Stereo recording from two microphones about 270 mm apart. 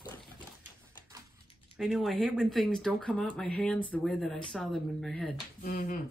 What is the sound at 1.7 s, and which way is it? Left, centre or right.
Speech, centre.